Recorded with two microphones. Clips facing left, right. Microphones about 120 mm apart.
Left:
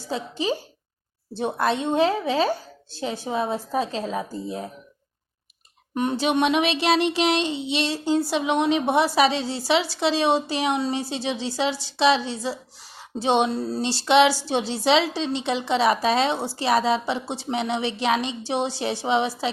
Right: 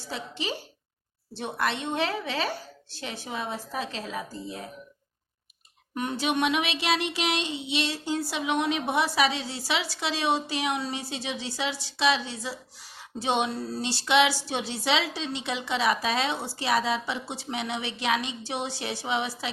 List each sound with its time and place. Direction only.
1.4 s a woman's voice: 25° left (ahead or behind)
3.0 s child singing: 30° left (ahead or behind)
5.9 s child singing: 30° left (ahead or behind)